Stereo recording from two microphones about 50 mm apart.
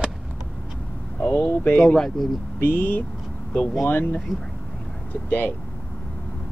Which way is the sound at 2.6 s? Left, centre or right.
Left.